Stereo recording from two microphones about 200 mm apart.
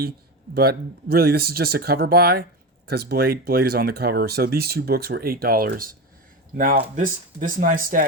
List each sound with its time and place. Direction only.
0.5 s speech: 50° right (ahead or behind)